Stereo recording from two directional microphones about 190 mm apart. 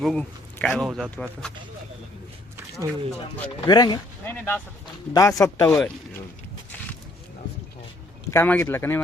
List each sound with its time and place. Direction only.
0.0 s speech: 5° left (ahead or behind)
2.6 s a sound: 15° right (ahead or behind)
3.7 s speech: 25° left (ahead or behind)
4.3 s a man's voice: 10° left (ahead or behind)
8.3 s a man's voice: 15° left (ahead or behind)